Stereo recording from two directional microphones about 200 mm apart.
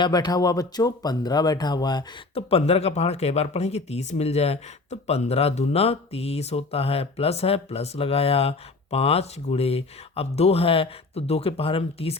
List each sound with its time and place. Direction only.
0.0 s speech: 20° left (ahead or behind)